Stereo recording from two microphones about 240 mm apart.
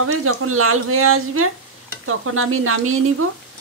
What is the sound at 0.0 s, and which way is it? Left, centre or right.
Speech, right.